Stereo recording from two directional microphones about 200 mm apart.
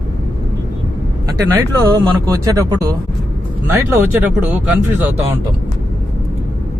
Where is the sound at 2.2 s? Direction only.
15° right (ahead or behind).